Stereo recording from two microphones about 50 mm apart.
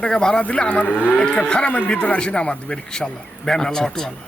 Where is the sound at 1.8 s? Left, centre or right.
Left; by 4.1 s centre.